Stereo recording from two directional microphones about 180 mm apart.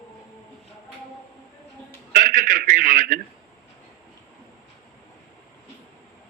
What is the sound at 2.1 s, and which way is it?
A man's voice, 50° right (ahead or behind).